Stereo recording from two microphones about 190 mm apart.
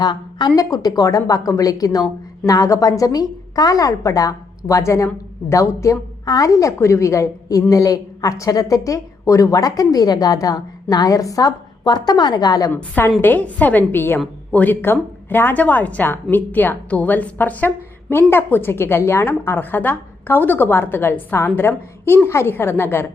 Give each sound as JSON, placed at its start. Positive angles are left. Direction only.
{"t": 0.0, "sound": "a woman's voice", "side_deg": 20}